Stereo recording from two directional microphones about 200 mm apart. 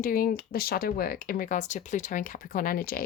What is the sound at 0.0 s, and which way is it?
Speech, 45° left (ahead or behind).